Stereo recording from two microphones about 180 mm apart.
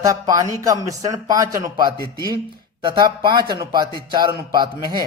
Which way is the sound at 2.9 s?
25° right (ahead or behind).